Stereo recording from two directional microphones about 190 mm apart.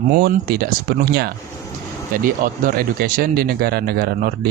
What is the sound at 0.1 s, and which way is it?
Speech, 55° right (ahead or behind).